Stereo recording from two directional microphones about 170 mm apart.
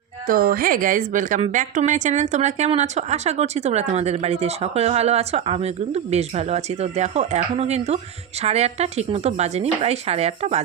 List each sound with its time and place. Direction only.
0.3 s speech: 55° right (ahead or behind); by 10.6 s 40° right (ahead or behind)